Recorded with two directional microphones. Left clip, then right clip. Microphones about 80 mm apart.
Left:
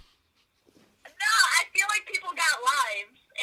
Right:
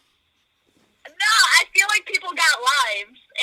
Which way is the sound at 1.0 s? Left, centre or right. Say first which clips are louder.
Right 6 dB; right.